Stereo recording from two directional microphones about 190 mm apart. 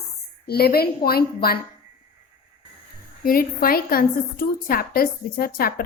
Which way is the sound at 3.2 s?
50° left (ahead or behind).